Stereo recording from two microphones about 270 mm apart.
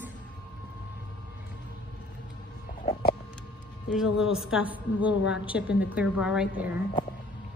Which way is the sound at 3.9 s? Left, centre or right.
Centre.